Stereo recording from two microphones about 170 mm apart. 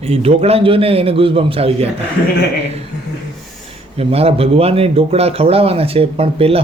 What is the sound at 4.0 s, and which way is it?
A man's voice, 35° right (ahead or behind).